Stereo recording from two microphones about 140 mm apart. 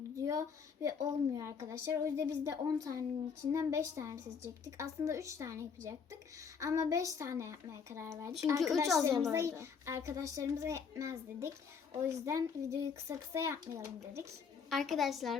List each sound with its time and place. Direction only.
0.2 s a woman's voice: 25° right (ahead or behind)
14.7 s a woman's voice: centre (ahead or behind)